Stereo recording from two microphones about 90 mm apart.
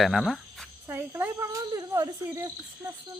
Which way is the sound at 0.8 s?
25° right (ahead or behind).